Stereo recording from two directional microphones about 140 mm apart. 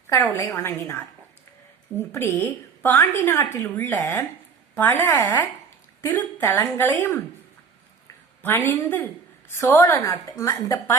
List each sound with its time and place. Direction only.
0.3 s a woman's voice: 20° left (ahead or behind)
2.1 s a woman's voice: 15° left (ahead or behind)
8.4 s a woman's voice: 15° left (ahead or behind)